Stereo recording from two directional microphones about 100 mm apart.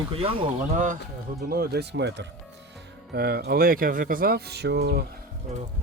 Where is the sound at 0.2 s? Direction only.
60° right (ahead or behind).